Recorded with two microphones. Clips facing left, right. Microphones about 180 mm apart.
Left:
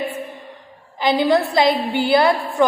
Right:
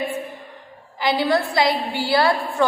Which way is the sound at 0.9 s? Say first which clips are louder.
Left 3 dB; 20° left (ahead or behind).